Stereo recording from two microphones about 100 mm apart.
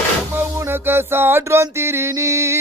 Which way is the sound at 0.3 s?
20° right (ahead or behind).